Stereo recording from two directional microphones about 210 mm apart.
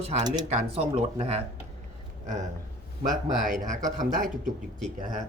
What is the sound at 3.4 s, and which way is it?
Speech, 40° right (ahead or behind).